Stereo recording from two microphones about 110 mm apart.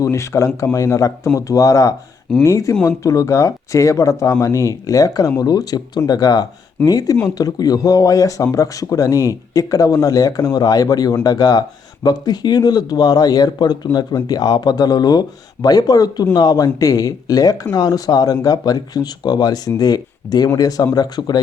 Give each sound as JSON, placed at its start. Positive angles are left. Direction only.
{"t": 0.0, "sound": "speech", "side_deg": 25}